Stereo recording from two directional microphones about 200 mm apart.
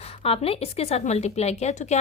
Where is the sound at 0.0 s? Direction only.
30° left (ahead or behind).